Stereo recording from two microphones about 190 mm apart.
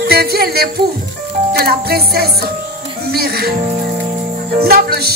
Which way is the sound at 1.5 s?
55° right (ahead or behind).